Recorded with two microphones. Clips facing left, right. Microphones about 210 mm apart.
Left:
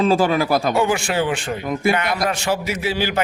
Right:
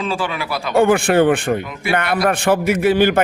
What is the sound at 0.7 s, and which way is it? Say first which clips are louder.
A man's voice: right 6 dB; 55° right (ahead or behind).